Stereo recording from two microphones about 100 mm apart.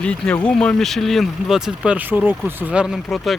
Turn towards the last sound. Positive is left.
turn(degrees=-5)  # may be behind; listen again after turning